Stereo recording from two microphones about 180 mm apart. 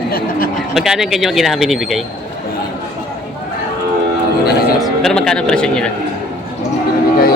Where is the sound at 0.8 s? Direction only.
Centre (ahead or behind).